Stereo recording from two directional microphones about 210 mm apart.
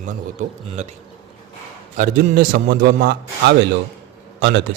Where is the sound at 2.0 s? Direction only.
40° right (ahead or behind).